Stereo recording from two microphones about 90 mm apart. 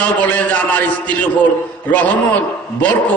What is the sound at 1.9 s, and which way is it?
Speech, 15° left (ahead or behind).